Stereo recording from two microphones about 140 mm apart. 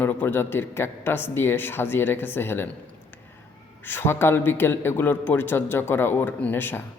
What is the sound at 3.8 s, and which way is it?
A man's voice, 15° left (ahead or behind).